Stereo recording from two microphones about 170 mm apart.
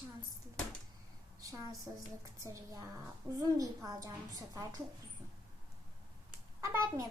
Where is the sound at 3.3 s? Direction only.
20° right (ahead or behind).